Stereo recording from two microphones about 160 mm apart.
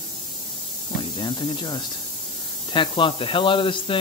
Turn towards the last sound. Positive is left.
turn(degrees=30)  # may be behind; listen again after turning